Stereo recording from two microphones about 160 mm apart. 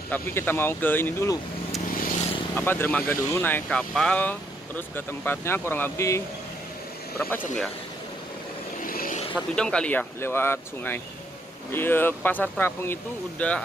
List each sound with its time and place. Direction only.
0.1 s speech: 15° left (ahead or behind)
2.0 s vehicle: 60° left (ahead or behind)
2.5 s speech: 15° left (ahead or behind)
8.8 s vehicle: 60° left (ahead or behind)
9.3 s speech: 5° left (ahead or behind)